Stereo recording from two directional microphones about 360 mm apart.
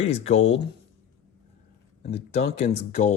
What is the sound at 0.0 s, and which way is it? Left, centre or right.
Speech, centre.